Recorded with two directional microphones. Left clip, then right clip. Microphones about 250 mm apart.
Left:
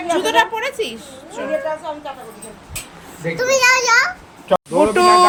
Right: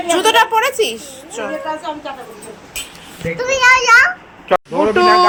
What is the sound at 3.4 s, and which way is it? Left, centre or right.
A child's voice, centre.